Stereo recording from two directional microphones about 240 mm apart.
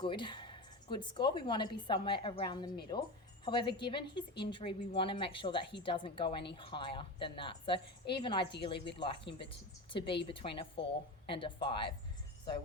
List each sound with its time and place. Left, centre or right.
0.0 s speech: centre